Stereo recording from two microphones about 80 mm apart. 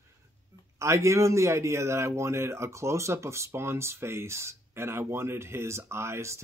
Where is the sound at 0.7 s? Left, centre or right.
Right.